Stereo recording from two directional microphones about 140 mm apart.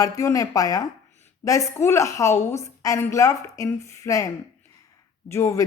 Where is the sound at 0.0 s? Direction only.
25° left (ahead or behind).